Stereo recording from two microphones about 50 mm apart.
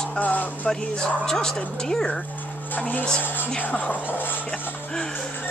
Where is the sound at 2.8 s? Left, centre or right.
Left.